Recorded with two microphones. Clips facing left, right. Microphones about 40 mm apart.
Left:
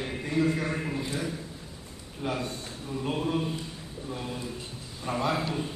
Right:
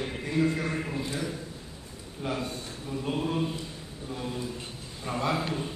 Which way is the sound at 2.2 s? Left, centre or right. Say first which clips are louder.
Left 1 dB; centre.